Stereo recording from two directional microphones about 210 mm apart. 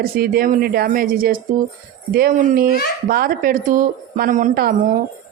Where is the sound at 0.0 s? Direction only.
45° right (ahead or behind).